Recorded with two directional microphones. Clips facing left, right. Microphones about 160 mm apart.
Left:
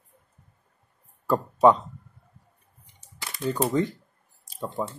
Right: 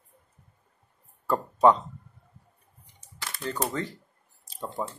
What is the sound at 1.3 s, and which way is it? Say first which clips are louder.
Speech: left 2 dB; 10° left (ahead or behind).